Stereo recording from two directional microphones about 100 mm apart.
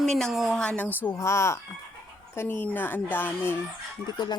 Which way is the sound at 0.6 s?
10° left (ahead or behind).